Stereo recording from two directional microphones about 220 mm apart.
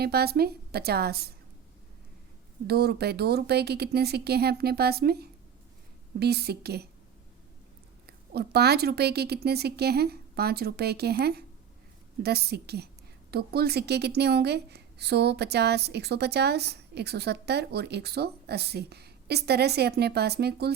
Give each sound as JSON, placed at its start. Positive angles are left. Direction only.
{"t": 0.0, "sound": "a woman's voice", "side_deg": -45}
{"t": 2.6, "sound": "a woman's voice", "side_deg": -45}
{"t": 8.0, "sound": "a woman's voice", "side_deg": -45}